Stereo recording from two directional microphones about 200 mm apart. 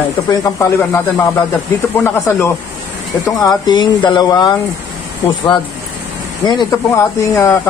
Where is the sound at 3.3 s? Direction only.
20° left (ahead or behind).